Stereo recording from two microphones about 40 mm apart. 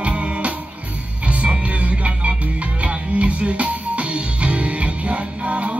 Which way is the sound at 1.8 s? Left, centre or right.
Right.